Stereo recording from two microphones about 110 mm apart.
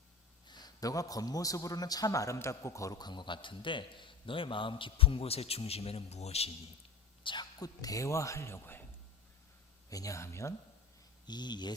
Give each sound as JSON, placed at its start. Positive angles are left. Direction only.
{"t": 0.4, "sound": "a man's voice", "side_deg": 40}
{"t": 7.3, "sound": "a man's voice", "side_deg": 40}
{"t": 9.9, "sound": "speech", "side_deg": 30}
{"t": 11.3, "sound": "speech", "side_deg": 40}